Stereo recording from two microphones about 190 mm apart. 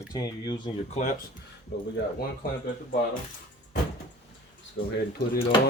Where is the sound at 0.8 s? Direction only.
40° left (ahead or behind).